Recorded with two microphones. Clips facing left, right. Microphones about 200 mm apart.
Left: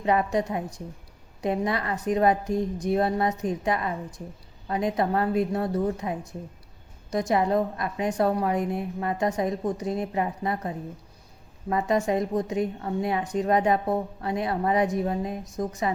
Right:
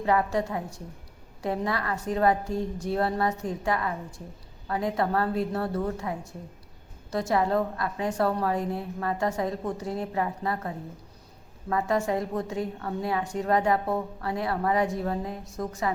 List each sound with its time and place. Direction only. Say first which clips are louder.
0.0 s a woman's voice: left 1 dB; 20° left (ahead or behind)